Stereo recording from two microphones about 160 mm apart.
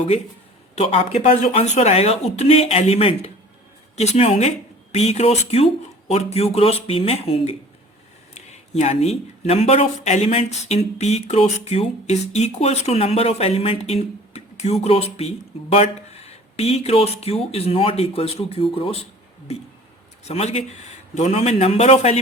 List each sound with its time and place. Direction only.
0.8 s speech: 35° left (ahead or behind)
20.2 s speech: 40° left (ahead or behind)